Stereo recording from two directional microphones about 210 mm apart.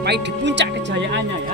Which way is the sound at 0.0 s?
55° right (ahead or behind).